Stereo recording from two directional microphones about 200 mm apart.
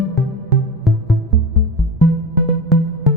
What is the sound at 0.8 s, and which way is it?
Music, centre (ahead or behind).